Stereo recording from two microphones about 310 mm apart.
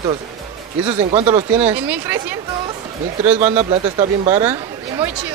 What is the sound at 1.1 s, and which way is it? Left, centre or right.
Speech, right.